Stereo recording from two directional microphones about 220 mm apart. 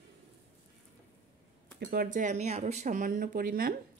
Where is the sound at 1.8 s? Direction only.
40° right (ahead or behind).